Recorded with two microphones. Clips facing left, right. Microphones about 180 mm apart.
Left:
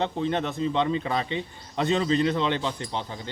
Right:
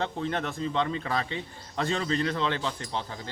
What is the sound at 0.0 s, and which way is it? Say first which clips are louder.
A man's voice: left 4 dB; 20° left (ahead or behind).